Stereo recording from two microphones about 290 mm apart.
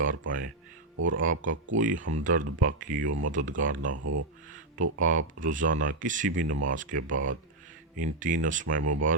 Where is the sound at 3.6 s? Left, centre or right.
Right.